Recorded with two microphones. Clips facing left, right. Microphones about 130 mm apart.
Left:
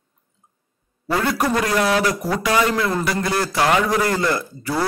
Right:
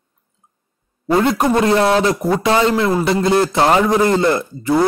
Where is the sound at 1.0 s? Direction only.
25° right (ahead or behind).